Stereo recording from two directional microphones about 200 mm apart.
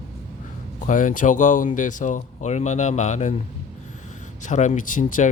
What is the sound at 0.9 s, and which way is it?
Speech, 40° left (ahead or behind).